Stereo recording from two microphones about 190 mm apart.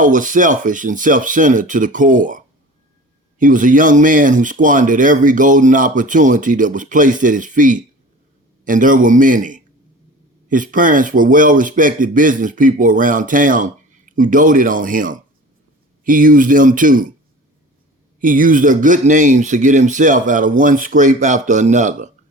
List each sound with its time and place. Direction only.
0.0 s speech: 45° right (ahead or behind)
18.2 s speech: 45° right (ahead or behind)